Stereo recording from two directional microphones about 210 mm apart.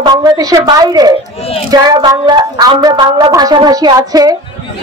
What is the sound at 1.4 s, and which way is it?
Speech, 30° left (ahead or behind).